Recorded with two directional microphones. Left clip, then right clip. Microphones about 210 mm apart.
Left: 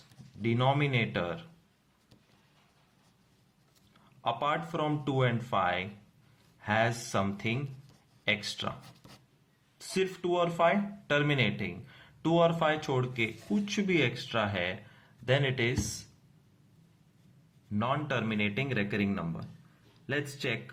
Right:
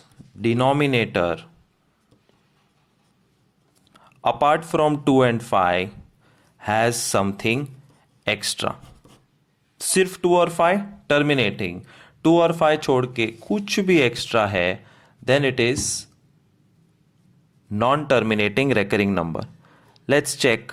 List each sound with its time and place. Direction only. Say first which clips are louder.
0.4 s speech: right 10 dB; 50° right (ahead or behind)
3.9 s speech: right 11 dB; 50° right (ahead or behind)
9.7 s speech: right 11 dB; 50° right (ahead or behind)
17.7 s speech: right 13 dB; 50° right (ahead or behind)